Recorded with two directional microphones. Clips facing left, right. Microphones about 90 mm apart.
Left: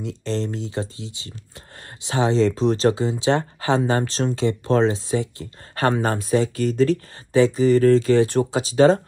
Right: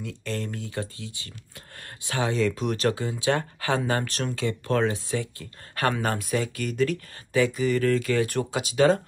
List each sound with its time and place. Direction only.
0.0 s speech: 25° left (ahead or behind)